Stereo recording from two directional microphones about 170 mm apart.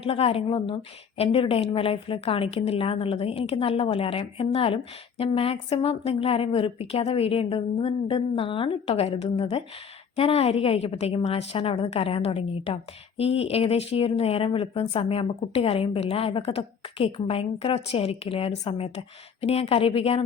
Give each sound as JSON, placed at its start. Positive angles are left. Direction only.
{"t": 0.0, "sound": "a woman's voice", "side_deg": 35}